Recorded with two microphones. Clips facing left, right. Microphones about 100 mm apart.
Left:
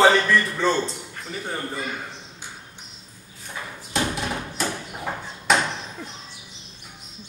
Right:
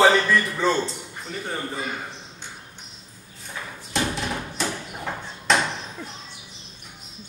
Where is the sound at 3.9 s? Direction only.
5° left (ahead or behind).